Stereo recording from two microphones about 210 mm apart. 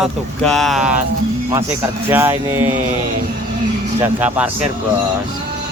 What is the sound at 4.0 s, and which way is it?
Speech, 5° right (ahead or behind).